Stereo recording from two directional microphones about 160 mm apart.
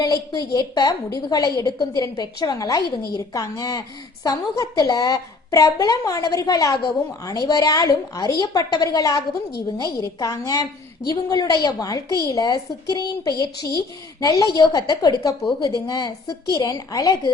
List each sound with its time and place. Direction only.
0.0 s a woman's voice: 25° left (ahead or behind)